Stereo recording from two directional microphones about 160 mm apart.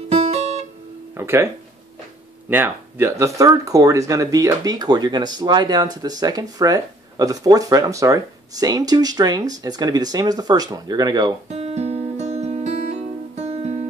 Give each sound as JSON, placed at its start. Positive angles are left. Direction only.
{"t": 0.2, "sound": "guitar", "side_deg": -40}
{"t": 1.1, "sound": "speech", "side_deg": -15}
{"t": 2.5, "sound": "speech", "side_deg": -15}
{"t": 11.4, "sound": "music", "side_deg": -45}